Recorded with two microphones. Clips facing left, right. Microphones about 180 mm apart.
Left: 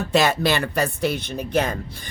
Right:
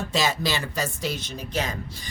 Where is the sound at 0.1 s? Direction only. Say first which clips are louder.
Left 7 dB; 60° left (ahead or behind).